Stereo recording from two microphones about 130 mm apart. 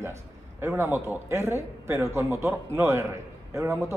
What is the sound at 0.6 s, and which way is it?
A man's voice, 15° right (ahead or behind).